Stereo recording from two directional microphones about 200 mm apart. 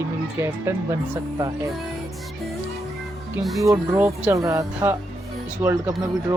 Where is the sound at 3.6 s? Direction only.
15° right (ahead or behind).